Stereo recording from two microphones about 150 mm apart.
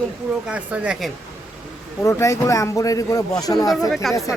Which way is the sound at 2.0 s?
20° left (ahead or behind).